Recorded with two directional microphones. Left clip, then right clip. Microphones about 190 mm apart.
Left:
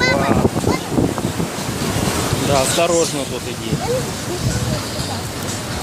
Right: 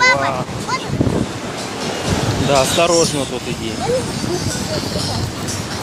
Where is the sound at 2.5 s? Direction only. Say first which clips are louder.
Right 3 dB; 15° right (ahead or behind).